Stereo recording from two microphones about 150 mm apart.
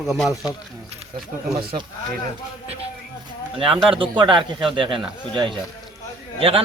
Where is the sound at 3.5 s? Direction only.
35° right (ahead or behind).